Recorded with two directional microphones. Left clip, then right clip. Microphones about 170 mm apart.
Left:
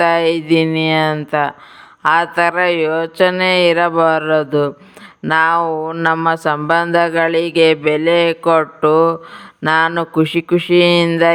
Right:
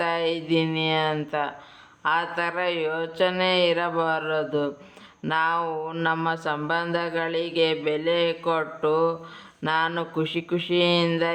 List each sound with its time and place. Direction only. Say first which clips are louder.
0.0 s speech: left 12 dB; 45° left (ahead or behind)